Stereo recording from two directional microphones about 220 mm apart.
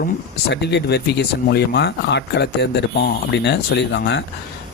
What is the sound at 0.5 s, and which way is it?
Speech, 50° left (ahead or behind).